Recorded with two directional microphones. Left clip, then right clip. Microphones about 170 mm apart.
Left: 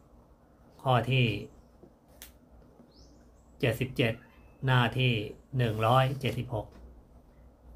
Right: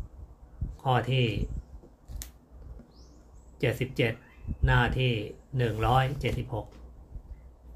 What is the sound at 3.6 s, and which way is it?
Speech, 15° left (ahead or behind).